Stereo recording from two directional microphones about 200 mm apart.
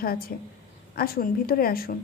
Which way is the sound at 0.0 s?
50° left (ahead or behind).